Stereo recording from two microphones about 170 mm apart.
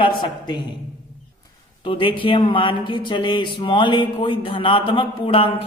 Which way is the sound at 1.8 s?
30° left (ahead or behind).